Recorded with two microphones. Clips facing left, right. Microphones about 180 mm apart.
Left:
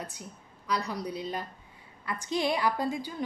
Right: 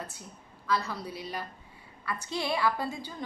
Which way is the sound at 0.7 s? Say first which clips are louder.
Even; 20° left (ahead or behind).